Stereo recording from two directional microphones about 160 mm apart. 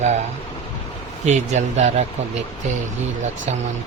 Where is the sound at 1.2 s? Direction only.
45° right (ahead or behind).